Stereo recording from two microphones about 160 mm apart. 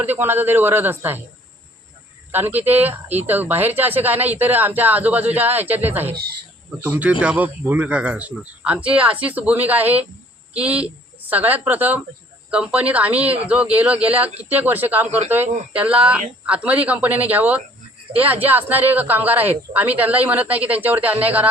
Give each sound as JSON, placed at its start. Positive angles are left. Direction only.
{"t": 0.0, "sound": "speech", "side_deg": -10}
{"t": 2.3, "sound": "a woman's voice", "side_deg": -10}